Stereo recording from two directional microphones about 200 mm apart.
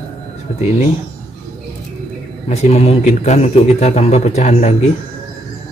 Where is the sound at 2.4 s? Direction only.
35° left (ahead or behind).